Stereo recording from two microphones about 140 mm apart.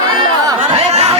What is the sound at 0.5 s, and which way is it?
Chatter, 50° right (ahead or behind).